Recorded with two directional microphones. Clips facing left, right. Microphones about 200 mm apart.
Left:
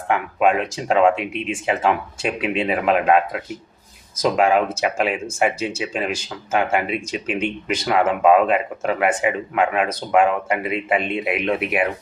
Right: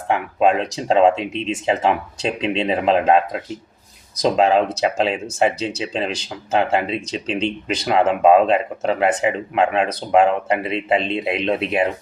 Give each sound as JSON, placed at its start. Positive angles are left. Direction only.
{"t": 0.1, "sound": "speech", "side_deg": -25}